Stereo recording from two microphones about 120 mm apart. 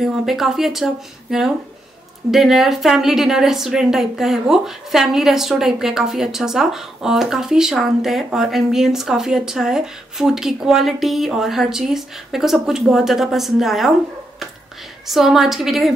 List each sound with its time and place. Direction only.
0.0 s a woman's voice: 5° right (ahead or behind)
15.0 s a woman's voice: centre (ahead or behind)